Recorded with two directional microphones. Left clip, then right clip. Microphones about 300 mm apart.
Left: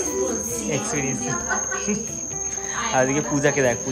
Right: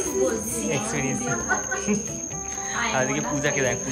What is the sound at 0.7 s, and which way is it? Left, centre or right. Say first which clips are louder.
Speech: left 1 dB; centre.